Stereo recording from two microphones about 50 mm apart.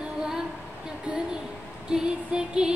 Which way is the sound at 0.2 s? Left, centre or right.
Centre.